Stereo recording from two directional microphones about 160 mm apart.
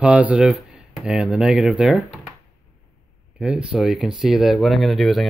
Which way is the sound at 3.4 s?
5° right (ahead or behind).